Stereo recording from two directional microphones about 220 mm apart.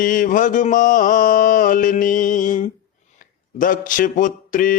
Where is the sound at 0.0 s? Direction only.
40° left (ahead or behind).